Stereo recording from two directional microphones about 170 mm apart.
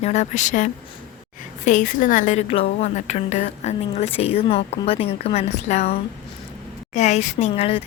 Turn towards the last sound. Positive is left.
turn(degrees=35)  # may be behind; listen again after turning